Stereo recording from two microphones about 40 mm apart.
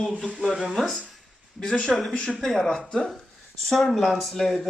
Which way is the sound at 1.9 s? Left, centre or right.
Centre.